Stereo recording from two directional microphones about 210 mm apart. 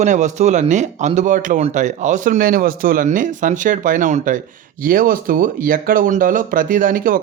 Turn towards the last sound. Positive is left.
turn(degrees=-40)  # may be behind; listen again after turning